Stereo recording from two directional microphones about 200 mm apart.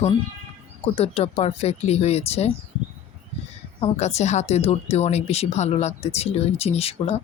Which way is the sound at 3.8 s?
30° left (ahead or behind).